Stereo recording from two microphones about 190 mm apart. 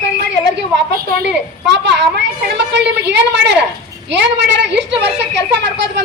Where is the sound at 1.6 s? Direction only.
65° right (ahead or behind).